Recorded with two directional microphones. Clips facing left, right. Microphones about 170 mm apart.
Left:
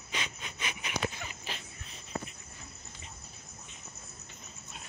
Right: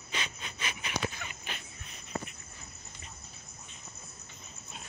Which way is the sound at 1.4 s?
30° left (ahead or behind).